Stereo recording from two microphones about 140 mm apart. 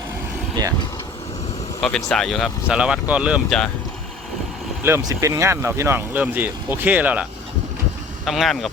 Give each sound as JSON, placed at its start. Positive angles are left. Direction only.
{"t": 1.8, "sound": "speech", "side_deg": 5}
{"t": 4.8, "sound": "speech", "side_deg": -20}
{"t": 8.2, "sound": "speech", "side_deg": 0}